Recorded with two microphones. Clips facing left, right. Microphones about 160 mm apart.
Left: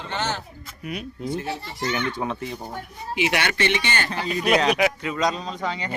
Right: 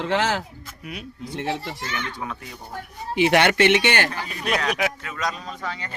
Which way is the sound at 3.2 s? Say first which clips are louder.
Right 6 dB; 50° right (ahead or behind).